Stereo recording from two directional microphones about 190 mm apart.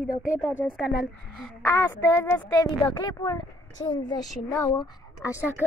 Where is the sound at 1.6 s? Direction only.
15° left (ahead or behind).